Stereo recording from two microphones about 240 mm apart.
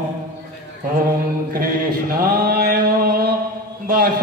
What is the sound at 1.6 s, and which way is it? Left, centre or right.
Mantra, right.